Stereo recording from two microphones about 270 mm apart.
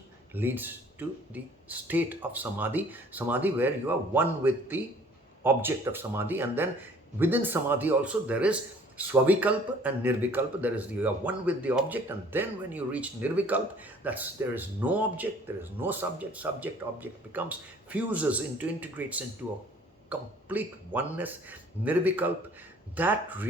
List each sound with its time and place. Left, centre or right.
0.3 s speech: centre